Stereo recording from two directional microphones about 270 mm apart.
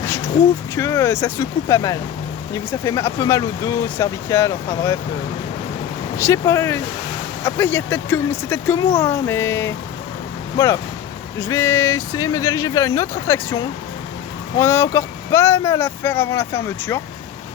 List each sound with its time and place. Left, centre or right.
0.8 s speech: centre
6.1 s speech: centre
11.4 s speech: centre